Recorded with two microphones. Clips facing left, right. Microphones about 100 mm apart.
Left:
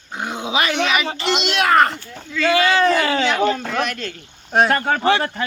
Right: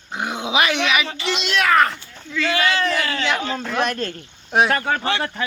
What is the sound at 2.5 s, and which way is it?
Speech, 25° left (ahead or behind).